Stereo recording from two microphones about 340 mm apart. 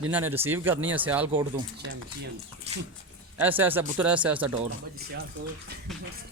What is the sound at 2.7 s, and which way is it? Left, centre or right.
Dog, centre.